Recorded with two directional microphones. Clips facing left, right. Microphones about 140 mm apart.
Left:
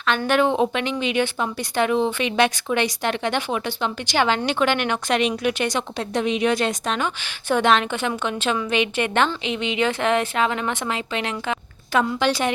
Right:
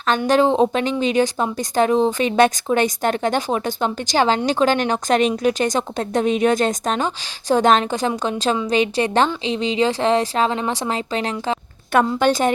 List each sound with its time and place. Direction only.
0.3 s speech: 35° right (ahead or behind)
11.9 s a woman's voice: 50° right (ahead or behind)